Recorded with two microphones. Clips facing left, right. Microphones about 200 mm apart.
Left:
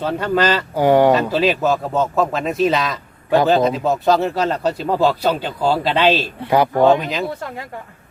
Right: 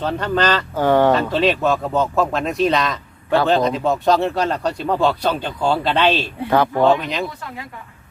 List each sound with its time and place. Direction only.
0.0 s speech: 5° left (ahead or behind)